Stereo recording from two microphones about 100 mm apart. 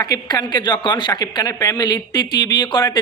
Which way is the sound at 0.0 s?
40° left (ahead or behind).